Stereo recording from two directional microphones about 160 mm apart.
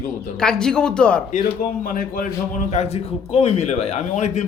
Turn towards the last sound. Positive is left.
turn(degrees=45)  # may be behind; listen again after turning